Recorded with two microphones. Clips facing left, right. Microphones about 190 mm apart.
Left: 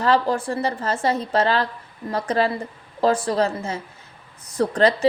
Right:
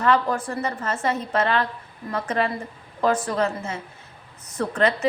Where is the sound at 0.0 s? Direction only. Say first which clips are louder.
Left 2 dB; 30° left (ahead or behind).